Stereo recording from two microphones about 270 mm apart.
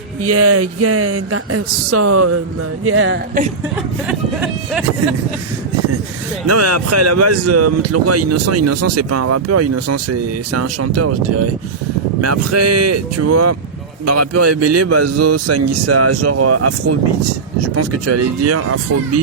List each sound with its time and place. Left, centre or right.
0.2 s a man's voice: right
2.8 s speech: right
4.0 s speech: centre
6.5 s a man's voice: right
12.2 s a man's voice: right